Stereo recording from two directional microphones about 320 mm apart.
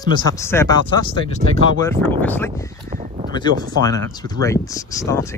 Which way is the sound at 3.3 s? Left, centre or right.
Centre.